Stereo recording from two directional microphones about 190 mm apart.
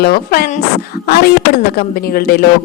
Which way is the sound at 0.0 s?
55° left (ahead or behind).